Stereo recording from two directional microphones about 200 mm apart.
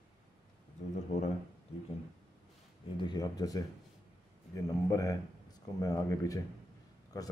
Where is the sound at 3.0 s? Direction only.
20° left (ahead or behind).